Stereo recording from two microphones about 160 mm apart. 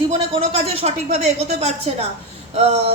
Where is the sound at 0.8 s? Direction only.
45° right (ahead or behind).